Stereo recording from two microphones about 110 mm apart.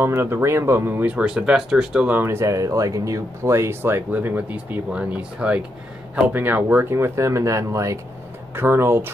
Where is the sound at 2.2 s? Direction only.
25° right (ahead or behind).